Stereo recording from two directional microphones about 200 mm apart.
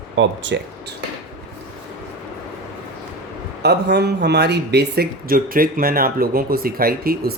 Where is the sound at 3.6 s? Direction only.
55° right (ahead or behind).